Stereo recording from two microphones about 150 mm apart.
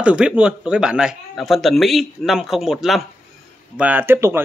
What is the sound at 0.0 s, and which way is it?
A man's voice, 5° right (ahead or behind).